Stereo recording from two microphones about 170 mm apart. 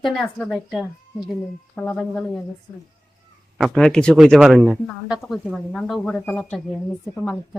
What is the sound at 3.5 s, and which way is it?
Speech, centre (ahead or behind).